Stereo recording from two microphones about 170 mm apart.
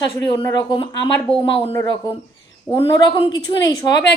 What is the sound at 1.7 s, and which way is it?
A woman's voice, 20° left (ahead or behind).